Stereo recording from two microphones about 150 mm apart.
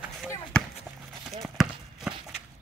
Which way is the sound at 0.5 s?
10° left (ahead or behind).